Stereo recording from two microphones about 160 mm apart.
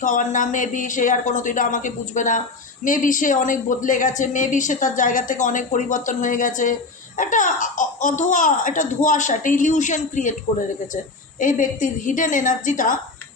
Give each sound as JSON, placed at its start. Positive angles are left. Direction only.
{"t": 0.0, "sound": "speech", "side_deg": 55}
{"t": 11.3, "sound": "a woman's voice", "side_deg": 55}